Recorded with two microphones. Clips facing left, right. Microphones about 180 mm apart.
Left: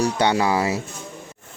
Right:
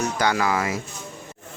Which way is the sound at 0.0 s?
30° left (ahead or behind).